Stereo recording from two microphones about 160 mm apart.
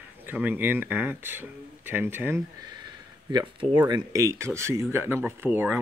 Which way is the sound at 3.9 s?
20° right (ahead or behind).